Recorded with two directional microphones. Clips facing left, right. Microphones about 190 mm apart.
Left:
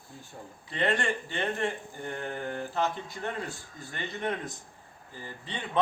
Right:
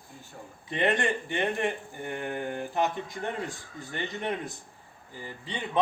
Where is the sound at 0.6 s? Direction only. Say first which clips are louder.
Right 2 dB; 20° right (ahead or behind).